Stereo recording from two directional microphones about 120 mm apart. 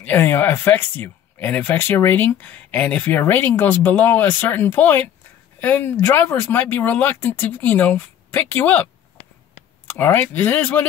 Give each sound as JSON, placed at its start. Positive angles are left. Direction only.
{"t": 0.0, "sound": "speech", "side_deg": 15}
{"t": 9.8, "sound": "speech", "side_deg": 15}